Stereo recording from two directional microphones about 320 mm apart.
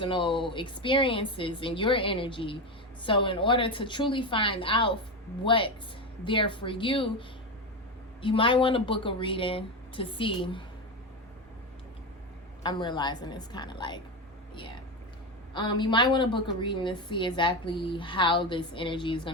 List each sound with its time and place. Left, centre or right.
0.0 s a woman's voice: centre
12.6 s a woman's voice: centre
15.5 s a woman's voice: centre